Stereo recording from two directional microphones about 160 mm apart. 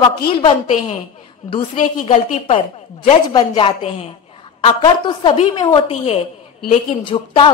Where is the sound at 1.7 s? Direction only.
55° left (ahead or behind).